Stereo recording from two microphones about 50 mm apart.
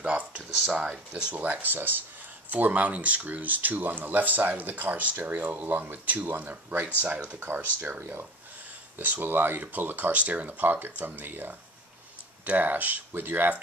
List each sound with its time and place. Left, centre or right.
0.0 s a sound: right
0.7 s speech: centre
1.3 s speech: right
7.3 s speech: right
8.9 s speech: right